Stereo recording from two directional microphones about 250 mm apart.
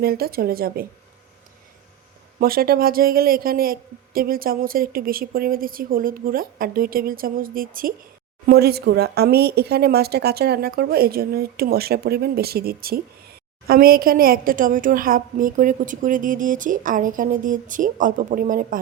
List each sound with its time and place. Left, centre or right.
0.0 s a woman's voice: right
2.4 s a woman's voice: right